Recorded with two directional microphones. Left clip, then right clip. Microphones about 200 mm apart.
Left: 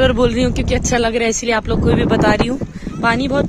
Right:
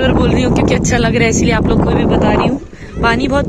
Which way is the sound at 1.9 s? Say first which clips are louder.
Even; 25° left (ahead or behind).